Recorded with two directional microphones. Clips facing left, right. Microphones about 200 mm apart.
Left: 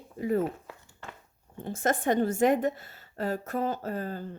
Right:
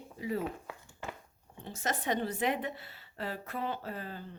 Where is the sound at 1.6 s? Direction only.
50° left (ahead or behind).